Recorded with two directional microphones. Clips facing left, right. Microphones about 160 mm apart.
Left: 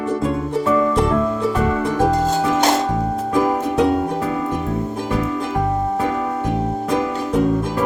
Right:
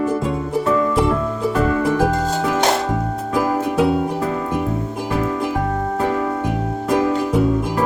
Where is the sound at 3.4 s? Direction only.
5° right (ahead or behind).